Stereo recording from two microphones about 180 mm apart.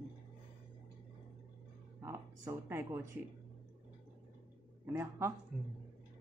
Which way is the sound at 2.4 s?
15° right (ahead or behind).